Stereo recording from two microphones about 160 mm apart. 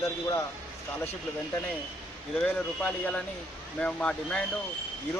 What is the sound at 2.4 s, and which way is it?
Speech, 5° left (ahead or behind).